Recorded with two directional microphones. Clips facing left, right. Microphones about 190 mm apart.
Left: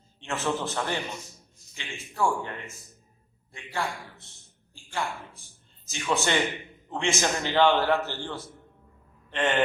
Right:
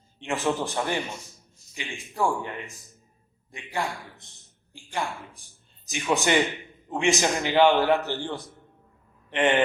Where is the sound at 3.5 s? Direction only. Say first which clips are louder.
Right 2 dB; 15° right (ahead or behind).